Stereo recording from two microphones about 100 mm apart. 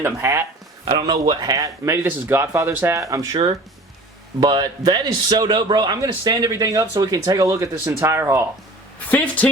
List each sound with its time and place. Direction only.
0.0 s speech: 25° right (ahead or behind)
0.9 s a man's voice: 45° right (ahead or behind)
4.4 s a man's voice: 50° right (ahead or behind); by 8.4 s 25° right (ahead or behind)
9.0 s a woman's voice: 15° left (ahead or behind)